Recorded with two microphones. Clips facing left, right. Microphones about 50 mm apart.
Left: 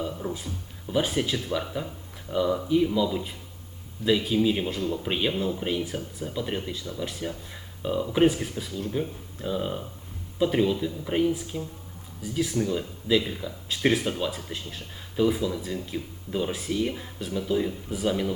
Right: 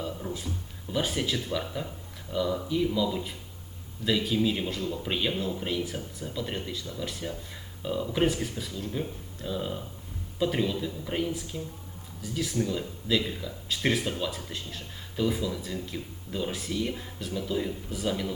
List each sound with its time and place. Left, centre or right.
0.2 s a sound: left
0.9 s speech: centre
10.3 s speech: centre